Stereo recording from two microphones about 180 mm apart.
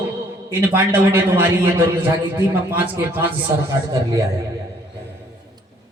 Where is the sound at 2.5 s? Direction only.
10° right (ahead or behind).